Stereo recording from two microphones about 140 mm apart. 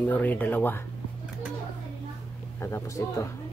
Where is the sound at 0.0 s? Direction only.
10° left (ahead or behind).